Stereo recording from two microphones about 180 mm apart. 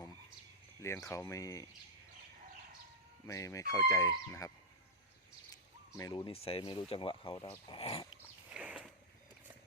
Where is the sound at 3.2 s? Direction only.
15° left (ahead or behind).